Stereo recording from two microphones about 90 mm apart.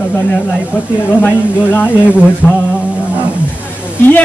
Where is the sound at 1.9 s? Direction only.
15° right (ahead or behind).